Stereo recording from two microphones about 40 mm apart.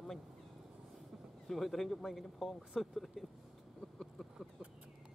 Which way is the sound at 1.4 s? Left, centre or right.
Centre.